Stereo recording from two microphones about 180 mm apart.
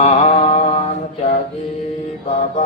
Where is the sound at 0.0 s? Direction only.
35° left (ahead or behind).